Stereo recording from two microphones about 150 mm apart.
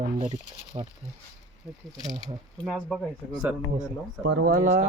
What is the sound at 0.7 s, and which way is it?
Speech, 35° right (ahead or behind).